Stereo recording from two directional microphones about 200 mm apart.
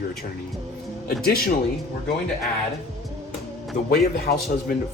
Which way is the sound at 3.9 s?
50° left (ahead or behind).